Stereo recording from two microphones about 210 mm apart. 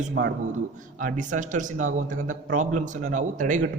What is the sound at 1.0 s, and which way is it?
A man's voice, 40° right (ahead or behind).